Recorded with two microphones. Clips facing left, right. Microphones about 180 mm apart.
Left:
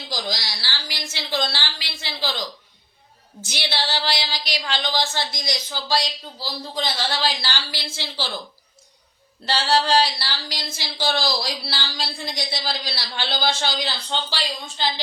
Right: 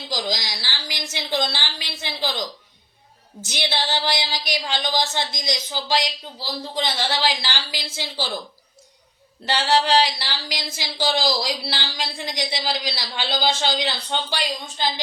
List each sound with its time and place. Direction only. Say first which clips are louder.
0.1 s a woman's voice: right 2 dB; 15° right (ahead or behind)
3.4 s a woman's voice: right 2 dB; 20° right (ahead or behind)
9.5 s a woman's voice: right 1 dB; 15° right (ahead or behind)